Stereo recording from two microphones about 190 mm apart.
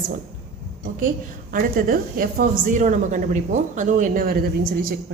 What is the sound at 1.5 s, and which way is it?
A woman's voice, 50° right (ahead or behind).